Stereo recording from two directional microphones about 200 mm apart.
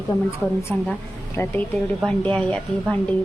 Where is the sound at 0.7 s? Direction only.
10° left (ahead or behind).